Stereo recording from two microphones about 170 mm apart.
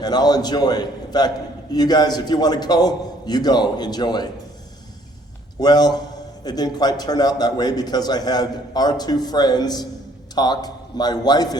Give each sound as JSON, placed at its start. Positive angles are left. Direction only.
{"t": 0.0, "sound": "a man's voice", "side_deg": 25}
{"t": 5.5, "sound": "a man's voice", "side_deg": 25}